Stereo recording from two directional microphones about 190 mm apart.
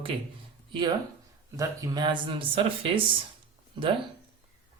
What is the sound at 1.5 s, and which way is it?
Speech, 20° right (ahead or behind).